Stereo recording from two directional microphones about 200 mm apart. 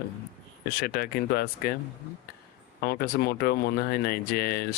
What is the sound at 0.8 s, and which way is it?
Speech, 50° left (ahead or behind).